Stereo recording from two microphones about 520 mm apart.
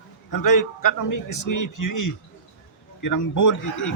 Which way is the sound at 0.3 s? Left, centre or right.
Left.